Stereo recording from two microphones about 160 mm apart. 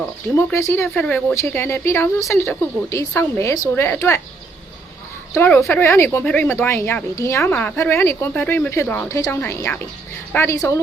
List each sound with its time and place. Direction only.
0.0 s a woman's voice: 15° left (ahead or behind)
5.3 s a woman's voice: 15° left (ahead or behind)